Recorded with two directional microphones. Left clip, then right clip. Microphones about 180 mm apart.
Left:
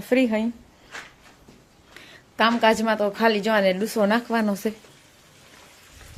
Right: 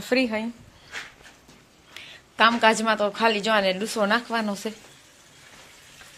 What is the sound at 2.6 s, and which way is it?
A woman's voice, 25° left (ahead or behind).